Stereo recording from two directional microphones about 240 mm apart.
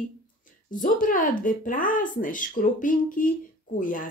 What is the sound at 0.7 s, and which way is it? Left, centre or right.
Speech, left.